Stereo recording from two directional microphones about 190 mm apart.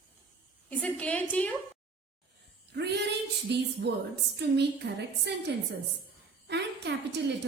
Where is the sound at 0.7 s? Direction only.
10° left (ahead or behind).